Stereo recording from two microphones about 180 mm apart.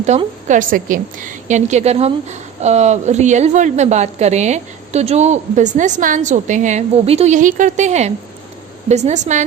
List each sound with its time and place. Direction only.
0.1 s a woman's voice: 40° right (ahead or behind)